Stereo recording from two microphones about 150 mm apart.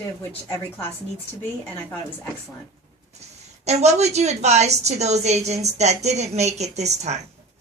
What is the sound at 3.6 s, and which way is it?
A woman's voice, 45° right (ahead or behind).